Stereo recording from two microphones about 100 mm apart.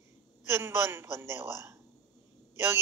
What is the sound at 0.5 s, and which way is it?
Speech, 25° right (ahead or behind).